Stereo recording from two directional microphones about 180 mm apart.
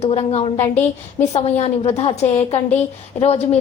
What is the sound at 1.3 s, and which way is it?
A woman's voice, 35° left (ahead or behind).